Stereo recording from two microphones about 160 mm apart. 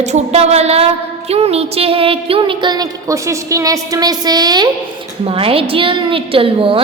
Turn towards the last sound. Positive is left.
turn(degrees=-35)  # may be behind; listen again after turning